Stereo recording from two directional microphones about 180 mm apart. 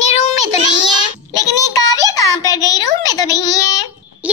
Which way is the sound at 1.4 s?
20° left (ahead or behind).